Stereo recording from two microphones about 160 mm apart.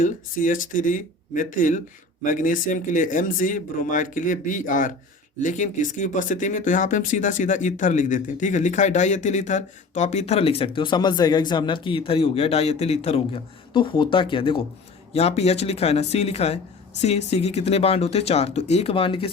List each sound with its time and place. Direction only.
0.0 s speech: 55° left (ahead or behind); by 19.3 s 35° left (ahead or behind)